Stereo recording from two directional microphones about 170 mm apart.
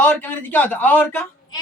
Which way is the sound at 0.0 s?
10° left (ahead or behind).